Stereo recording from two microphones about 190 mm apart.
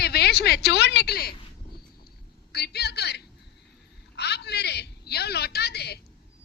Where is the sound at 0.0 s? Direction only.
55° left (ahead or behind).